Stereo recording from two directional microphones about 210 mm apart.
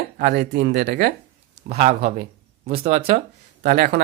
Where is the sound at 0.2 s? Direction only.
50° right (ahead or behind).